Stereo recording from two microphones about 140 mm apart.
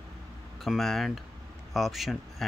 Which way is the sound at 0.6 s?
Centre (ahead or behind).